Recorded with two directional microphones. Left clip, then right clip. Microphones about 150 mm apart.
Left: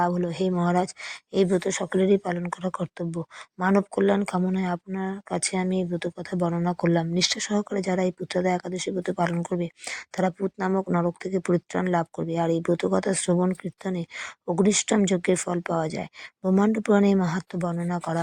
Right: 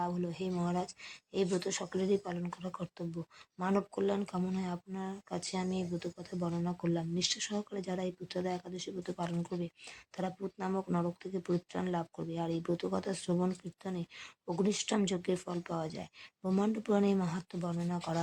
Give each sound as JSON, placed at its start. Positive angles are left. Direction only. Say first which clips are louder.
{"t": 0.0, "sound": "speech", "louder": "left 12 dB", "side_deg": 60}
{"t": 1.5, "sound": "speech", "louder": "left 10 dB", "side_deg": 50}
{"t": 9.3, "sound": "speech", "louder": "left 11 dB", "side_deg": 45}